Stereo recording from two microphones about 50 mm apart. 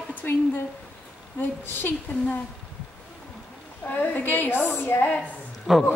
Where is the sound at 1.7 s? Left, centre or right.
Left.